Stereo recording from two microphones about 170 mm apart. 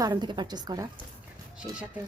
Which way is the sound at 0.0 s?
25° right (ahead or behind).